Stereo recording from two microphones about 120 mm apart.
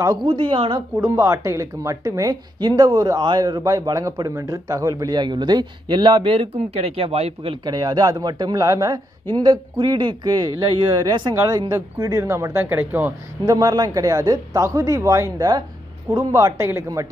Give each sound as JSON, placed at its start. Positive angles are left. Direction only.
{"t": 0.2, "sound": "speech", "side_deg": -40}
{"t": 0.9, "sound": "a woman's voice", "side_deg": -20}
{"t": 7.6, "sound": "a woman's voice", "side_deg": -35}
{"t": 9.3, "sound": "a woman's voice", "side_deg": -40}
{"t": 13.5, "sound": "a woman's voice", "side_deg": -30}